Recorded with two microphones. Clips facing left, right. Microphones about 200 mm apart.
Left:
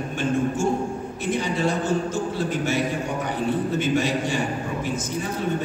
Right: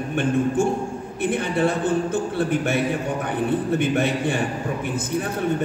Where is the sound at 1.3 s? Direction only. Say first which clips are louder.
Right 2 dB; 60° right (ahead or behind).